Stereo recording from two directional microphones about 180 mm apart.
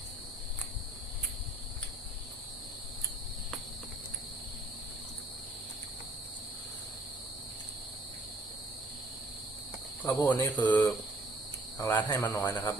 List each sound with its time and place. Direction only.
10.0 s speech: 10° left (ahead or behind)
11.8 s speech: 20° left (ahead or behind)